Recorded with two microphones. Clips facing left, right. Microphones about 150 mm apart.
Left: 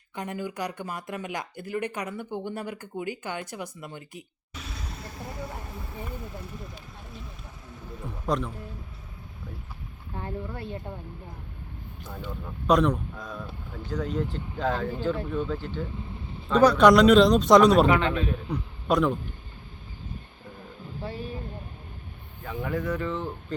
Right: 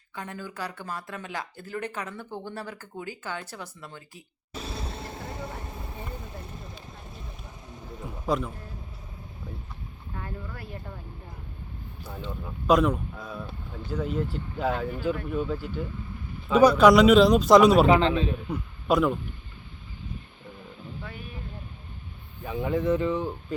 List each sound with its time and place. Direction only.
0.2 s speech: 15° left (ahead or behind)
4.5 s vehicle: 30° right (ahead or behind)
8.0 s speech: centre (ahead or behind)
10.2 s speech: 25° left (ahead or behind)
12.6 s speech: 5° right (ahead or behind)
17.8 s a man's voice: 25° right (ahead or behind)
18.4 s a man's voice: 5° right (ahead or behind)
21.0 s speech: 30° left (ahead or behind)
22.4 s speech: 20° right (ahead or behind)